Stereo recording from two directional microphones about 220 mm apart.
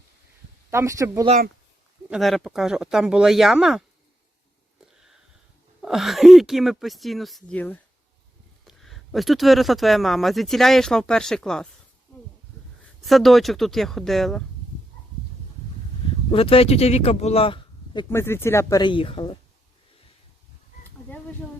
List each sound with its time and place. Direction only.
0.7 s speech: 15° right (ahead or behind)
2.0 s speech: centre (ahead or behind)
5.8 s speech: centre (ahead or behind)
13.0 s speech: centre (ahead or behind)
16.3 s speech: 25° left (ahead or behind)
18.1 s speech: 10° left (ahead or behind)